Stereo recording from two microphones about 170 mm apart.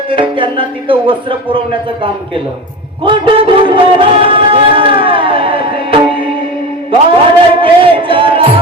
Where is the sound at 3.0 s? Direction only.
30° right (ahead or behind).